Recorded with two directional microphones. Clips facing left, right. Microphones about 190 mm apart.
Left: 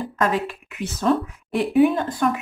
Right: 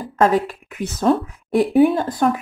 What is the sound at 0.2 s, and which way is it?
Speech, 45° right (ahead or behind).